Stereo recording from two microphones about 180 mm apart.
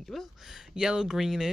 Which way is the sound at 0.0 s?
Centre (ahead or behind).